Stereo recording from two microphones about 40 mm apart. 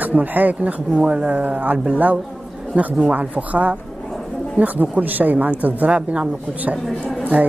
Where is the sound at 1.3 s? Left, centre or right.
Right.